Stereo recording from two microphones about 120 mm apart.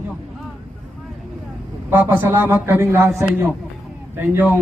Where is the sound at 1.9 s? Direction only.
15° right (ahead or behind).